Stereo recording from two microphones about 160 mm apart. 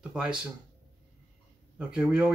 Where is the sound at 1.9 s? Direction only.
5° right (ahead or behind).